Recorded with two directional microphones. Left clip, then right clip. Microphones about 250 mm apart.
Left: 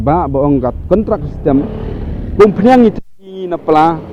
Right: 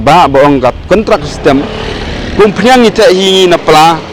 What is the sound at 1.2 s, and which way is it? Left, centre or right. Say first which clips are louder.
A man's voice: right 6 dB; centre.